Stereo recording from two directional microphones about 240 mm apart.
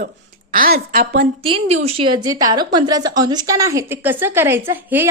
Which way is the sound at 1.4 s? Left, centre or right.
Right.